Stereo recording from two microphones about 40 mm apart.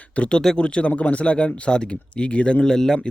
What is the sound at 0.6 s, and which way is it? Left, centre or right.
Speech, left.